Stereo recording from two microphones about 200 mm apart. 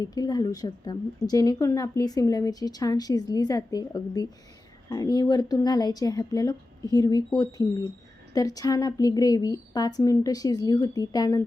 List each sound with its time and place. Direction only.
0.0 s a woman's voice: 20° left (ahead or behind)